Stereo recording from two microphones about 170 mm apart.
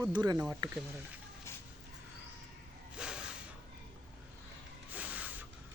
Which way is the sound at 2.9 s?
5° right (ahead or behind).